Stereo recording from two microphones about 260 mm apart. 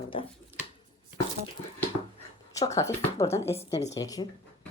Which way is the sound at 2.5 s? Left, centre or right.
Centre.